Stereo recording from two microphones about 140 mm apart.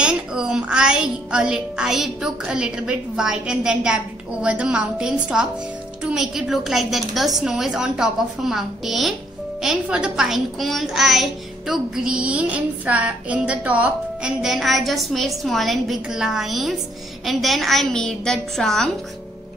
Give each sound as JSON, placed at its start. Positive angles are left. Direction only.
{"t": 0.0, "sound": "a child's voice", "side_deg": -5}